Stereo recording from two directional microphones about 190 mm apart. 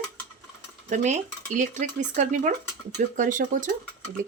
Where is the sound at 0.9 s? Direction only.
40° right (ahead or behind).